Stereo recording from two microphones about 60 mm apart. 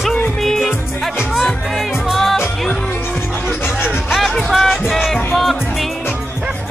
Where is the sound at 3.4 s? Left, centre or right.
Left.